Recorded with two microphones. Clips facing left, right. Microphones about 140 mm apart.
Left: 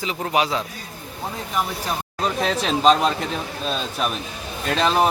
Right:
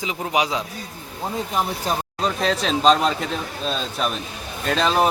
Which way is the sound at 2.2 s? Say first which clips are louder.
Even; 5° left (ahead or behind).